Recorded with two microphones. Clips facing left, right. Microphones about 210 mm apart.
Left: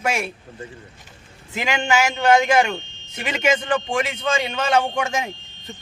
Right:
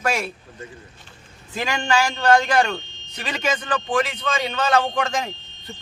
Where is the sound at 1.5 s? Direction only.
20° left (ahead or behind).